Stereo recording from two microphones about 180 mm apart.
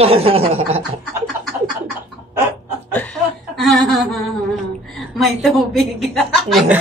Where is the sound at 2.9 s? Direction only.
10° left (ahead or behind).